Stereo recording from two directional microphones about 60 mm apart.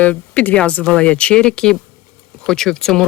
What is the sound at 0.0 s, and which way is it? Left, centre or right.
A woman's voice, left.